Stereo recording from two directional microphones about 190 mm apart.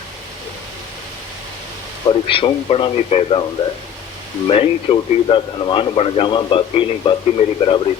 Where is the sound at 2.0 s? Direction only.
30° left (ahead or behind).